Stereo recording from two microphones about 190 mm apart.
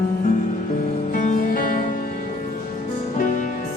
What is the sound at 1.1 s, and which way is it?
Music, 45° left (ahead or behind).